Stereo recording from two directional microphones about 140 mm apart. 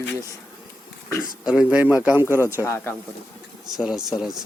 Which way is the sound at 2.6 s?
20° left (ahead or behind).